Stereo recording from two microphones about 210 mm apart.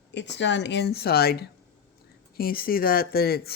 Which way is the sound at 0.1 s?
55° left (ahead or behind).